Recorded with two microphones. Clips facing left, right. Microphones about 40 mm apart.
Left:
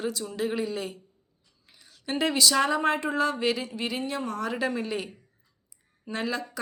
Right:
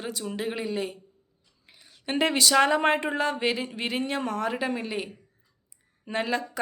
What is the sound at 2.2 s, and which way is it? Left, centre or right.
Speech, right.